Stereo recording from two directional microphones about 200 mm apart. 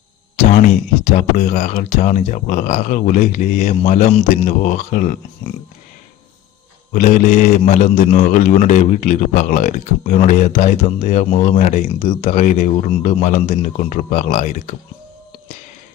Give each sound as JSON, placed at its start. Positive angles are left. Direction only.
{"t": 1.0, "sound": "a man's voice", "side_deg": 35}
{"t": 6.9, "sound": "a man's voice", "side_deg": 40}